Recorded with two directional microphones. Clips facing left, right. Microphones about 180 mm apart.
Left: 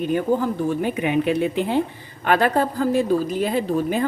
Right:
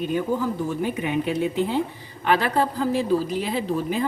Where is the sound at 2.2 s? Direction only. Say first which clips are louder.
Left 3 dB; 50° left (ahead or behind).